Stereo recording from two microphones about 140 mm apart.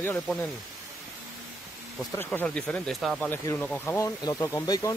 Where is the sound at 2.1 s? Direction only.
15° left (ahead or behind).